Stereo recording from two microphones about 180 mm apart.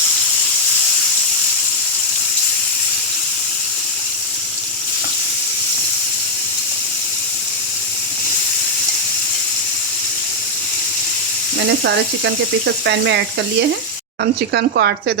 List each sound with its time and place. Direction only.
11.8 s speech: 75° right (ahead or behind)
14.5 s speech: 70° right (ahead or behind)